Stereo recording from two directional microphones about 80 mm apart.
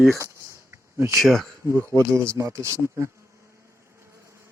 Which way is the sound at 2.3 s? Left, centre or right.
Right.